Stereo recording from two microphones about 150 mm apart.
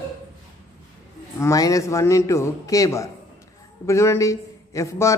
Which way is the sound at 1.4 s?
20° left (ahead or behind).